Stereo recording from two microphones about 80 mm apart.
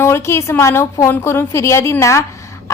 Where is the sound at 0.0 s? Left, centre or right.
Left.